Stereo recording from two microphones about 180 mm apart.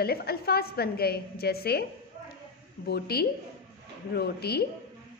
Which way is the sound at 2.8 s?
60° left (ahead or behind).